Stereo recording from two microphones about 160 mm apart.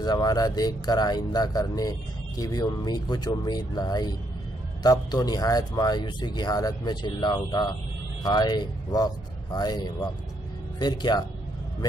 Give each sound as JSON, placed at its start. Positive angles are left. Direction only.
{"t": 0.0, "sound": "speech", "side_deg": 25}